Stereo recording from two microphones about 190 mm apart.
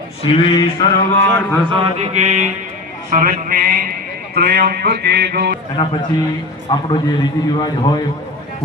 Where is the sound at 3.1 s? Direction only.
45° right (ahead or behind).